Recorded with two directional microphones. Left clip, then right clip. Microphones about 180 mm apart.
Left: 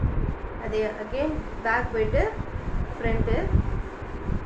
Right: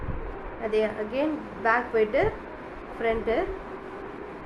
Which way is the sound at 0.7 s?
55° right (ahead or behind).